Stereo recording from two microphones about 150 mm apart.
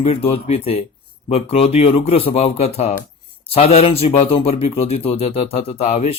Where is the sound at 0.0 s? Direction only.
40° left (ahead or behind).